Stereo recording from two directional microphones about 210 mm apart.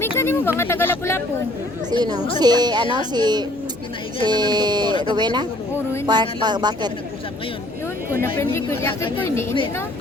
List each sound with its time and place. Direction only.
0.0 s speech: 10° left (ahead or behind)
1.9 s speech: 20° right (ahead or behind)
8.4 s speech: 10° left (ahead or behind)